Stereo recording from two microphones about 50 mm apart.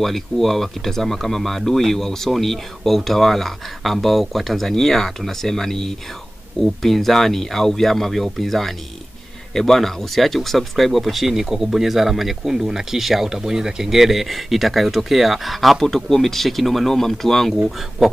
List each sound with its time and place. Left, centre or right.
0.0 s speech: centre